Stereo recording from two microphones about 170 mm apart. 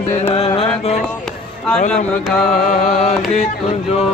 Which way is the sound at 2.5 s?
45° left (ahead or behind).